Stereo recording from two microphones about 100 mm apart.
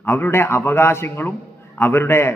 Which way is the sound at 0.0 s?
20° left (ahead or behind).